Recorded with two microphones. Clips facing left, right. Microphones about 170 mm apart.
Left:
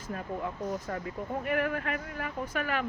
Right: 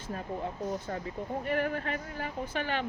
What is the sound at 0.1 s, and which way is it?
Speech, 30° right (ahead or behind).